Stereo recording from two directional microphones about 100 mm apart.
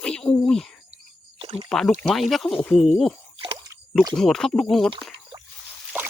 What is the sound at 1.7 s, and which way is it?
Speech, 5° left (ahead or behind).